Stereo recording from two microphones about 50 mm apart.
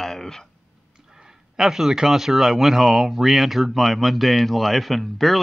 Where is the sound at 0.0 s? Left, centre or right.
Centre.